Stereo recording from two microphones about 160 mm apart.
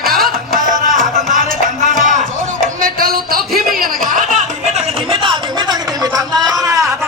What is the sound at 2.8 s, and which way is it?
Chuckle, 65° right (ahead or behind).